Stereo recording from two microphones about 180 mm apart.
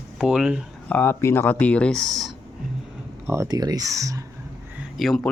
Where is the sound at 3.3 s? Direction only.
20° right (ahead or behind).